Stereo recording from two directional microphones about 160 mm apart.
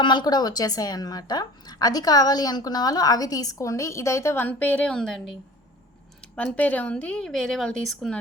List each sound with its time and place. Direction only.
0.0 s a woman's voice: 30° left (ahead or behind); by 8.2 s 5° left (ahead or behind)